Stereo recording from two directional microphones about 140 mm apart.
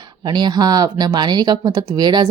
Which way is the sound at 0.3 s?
30° right (ahead or behind).